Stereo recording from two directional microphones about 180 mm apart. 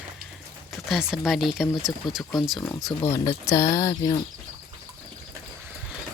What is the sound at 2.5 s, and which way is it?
Speech, 15° left (ahead or behind).